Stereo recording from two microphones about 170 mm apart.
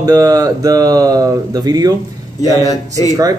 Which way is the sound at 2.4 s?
20° left (ahead or behind).